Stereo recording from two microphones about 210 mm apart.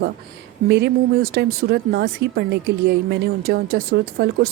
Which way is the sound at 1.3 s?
50° right (ahead or behind).